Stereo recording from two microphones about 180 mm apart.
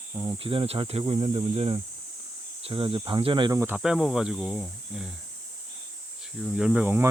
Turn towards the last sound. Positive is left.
turn(degrees=-10)  # may be behind; listen again after turning